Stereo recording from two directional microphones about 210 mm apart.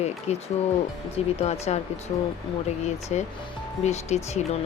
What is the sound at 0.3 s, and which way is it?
Speech, 30° left (ahead or behind).